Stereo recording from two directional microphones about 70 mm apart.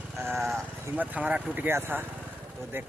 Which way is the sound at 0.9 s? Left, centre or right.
Centre.